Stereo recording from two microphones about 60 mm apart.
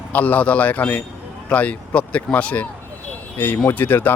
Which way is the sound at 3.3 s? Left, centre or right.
Left.